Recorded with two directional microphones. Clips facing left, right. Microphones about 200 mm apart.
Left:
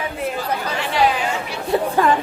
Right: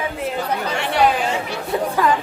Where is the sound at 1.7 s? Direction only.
30° left (ahead or behind).